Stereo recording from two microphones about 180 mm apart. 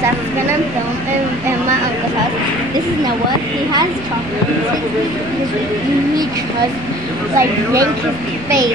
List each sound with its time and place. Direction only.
7.3 s speech: 15° right (ahead or behind)